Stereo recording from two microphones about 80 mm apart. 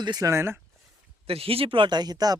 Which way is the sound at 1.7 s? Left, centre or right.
Right.